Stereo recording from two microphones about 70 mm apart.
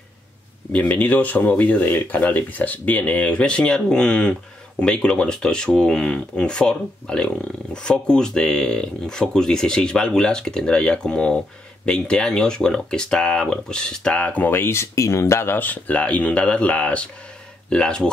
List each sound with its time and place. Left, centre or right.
0.7 s speech: left
14.5 s speech: left; by 18.1 s centre